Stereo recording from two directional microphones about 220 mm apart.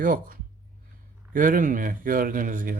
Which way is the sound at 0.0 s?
40° right (ahead or behind).